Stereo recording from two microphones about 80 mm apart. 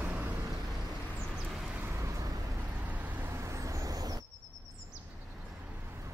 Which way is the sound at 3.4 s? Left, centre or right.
Right.